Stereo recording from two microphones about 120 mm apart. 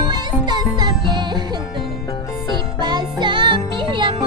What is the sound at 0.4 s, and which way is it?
Music, 40° right (ahead or behind).